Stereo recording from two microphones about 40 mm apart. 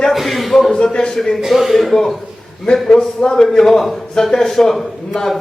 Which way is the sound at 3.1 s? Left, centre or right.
Centre.